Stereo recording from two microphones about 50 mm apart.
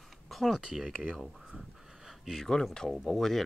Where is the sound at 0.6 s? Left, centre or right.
Centre.